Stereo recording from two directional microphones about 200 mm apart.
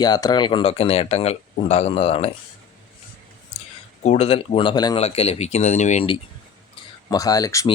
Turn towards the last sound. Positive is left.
turn(degrees=15)  # may be behind; listen again after turning